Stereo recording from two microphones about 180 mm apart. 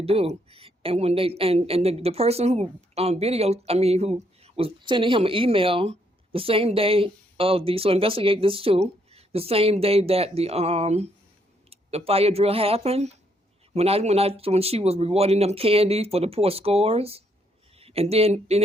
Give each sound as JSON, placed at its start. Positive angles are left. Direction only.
{"t": 0.0, "sound": "speech", "side_deg": -35}